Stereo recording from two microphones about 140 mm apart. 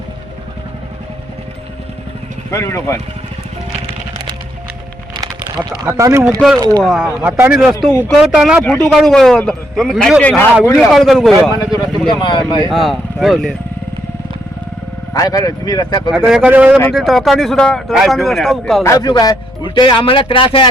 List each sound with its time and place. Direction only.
2.5 s speech: 20° left (ahead or behind)
5.1 s typing: 30° right (ahead or behind)
5.8 s speech: 20° right (ahead or behind)
6.8 s speech: centre (ahead or behind)
7.2 s speech: 10° right (ahead or behind)
8.6 s speech: 5° left (ahead or behind)
11.7 s speech: 30° left (ahead or behind)
12.7 s speech: centre (ahead or behind)
15.1 s speech: 25° left (ahead or behind)
16.1 s speech: 5° right (ahead or behind)
16.9 s speech: centre (ahead or behind)
18.8 s speech: 25° left (ahead or behind)